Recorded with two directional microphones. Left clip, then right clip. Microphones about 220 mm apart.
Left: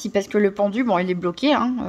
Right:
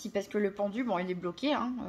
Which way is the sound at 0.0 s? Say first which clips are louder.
Left 12 dB; 45° left (ahead or behind).